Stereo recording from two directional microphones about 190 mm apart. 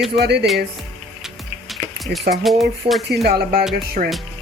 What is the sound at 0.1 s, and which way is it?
Speech, 60° right (ahead or behind).